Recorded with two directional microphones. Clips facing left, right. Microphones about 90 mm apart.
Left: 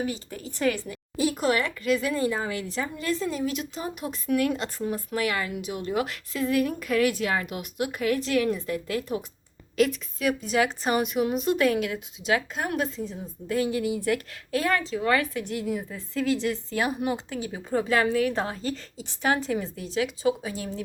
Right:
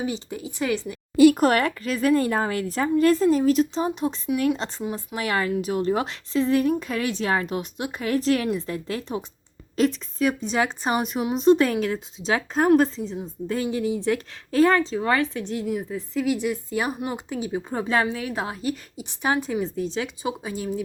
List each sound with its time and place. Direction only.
0.0 s a woman's voice: 20° right (ahead or behind)
1.1 s speech: 75° right (ahead or behind)
1.4 s a woman's voice: 50° right (ahead or behind); by 4.7 s 30° right (ahead or behind)
4.8 s a woman's voice: 20° right (ahead or behind)
5.2 s a woman's voice: 40° right (ahead or behind)
8.1 s a woman's voice: 35° right (ahead or behind)
13.1 s a woman's voice: 25° right (ahead or behind)
15.9 s a woman's voice: 15° right (ahead or behind)